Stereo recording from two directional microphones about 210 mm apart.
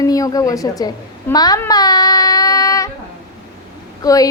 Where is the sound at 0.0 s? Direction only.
15° left (ahead or behind).